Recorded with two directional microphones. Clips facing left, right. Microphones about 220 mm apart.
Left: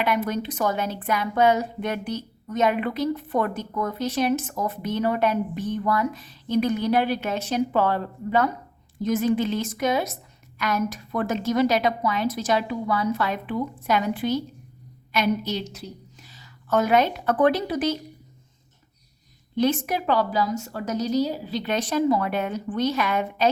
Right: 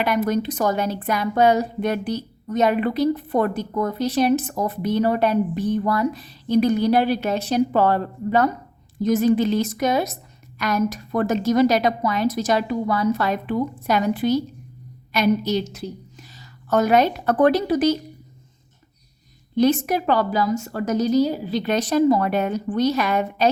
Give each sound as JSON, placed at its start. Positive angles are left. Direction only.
{"t": 0.0, "sound": "a woman's voice", "side_deg": -40}
{"t": 19.5, "sound": "a woman's voice", "side_deg": -40}